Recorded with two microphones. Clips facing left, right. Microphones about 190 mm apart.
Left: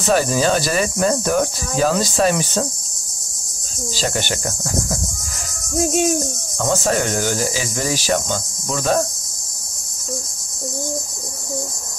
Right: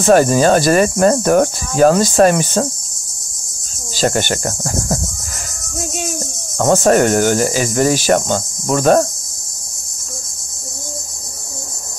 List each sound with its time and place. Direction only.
0.0 s speech: 50° right (ahead or behind)
3.9 s speech: 50° right (ahead or behind)
6.6 s speech: 55° right (ahead or behind)